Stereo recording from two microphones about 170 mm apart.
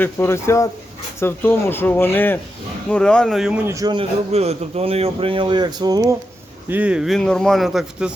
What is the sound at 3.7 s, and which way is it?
Speech, 25° right (ahead or behind).